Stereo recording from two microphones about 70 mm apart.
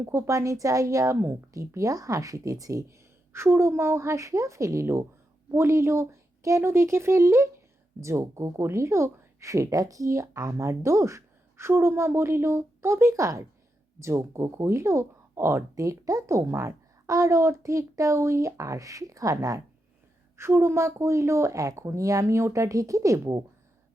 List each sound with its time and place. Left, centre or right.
0.0 s a woman's voice: right
15.7 s speech: right
20.3 s speech: right